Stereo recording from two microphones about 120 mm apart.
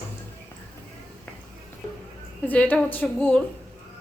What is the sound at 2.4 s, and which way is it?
A woman's voice, 15° left (ahead or behind).